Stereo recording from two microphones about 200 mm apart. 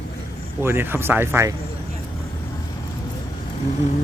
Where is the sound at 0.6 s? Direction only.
10° right (ahead or behind).